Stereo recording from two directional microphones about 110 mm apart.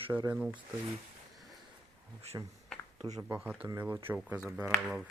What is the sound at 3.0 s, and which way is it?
Speech, 35° right (ahead or behind).